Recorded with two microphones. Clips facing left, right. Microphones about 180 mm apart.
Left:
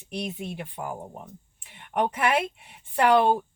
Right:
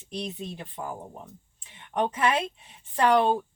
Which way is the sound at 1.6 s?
15° left (ahead or behind).